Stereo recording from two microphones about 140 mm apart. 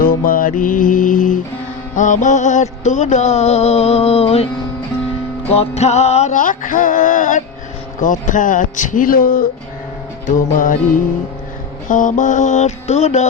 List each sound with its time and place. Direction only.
0.0 s music: 85° left; by 4.4 s 45° left (ahead or behind)
5.5 s music: 50° left (ahead or behind)
8.0 s speech: 70° left (ahead or behind); by 9.5 s 90° left
10.2 s speech: 70° left (ahead or behind)
11.9 s music: 70° left (ahead or behind); by 13.2 s 55° left (ahead or behind)